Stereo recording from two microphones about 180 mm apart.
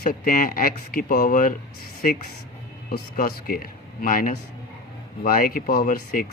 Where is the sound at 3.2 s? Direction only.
55° left (ahead or behind).